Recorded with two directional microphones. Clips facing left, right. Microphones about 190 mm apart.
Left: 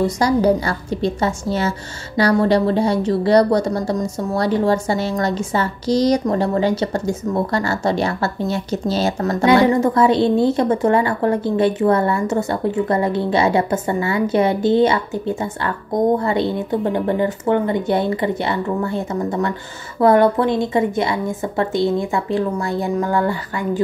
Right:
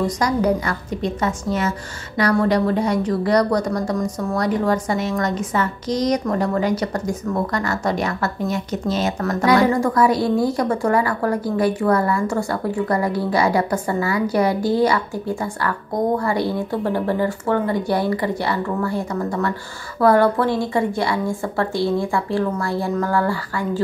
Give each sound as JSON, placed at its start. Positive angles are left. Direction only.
{"t": 0.2, "sound": "a woman's voice", "side_deg": 30}